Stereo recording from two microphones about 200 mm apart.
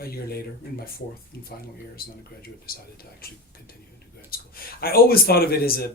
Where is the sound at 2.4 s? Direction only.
50° left (ahead or behind).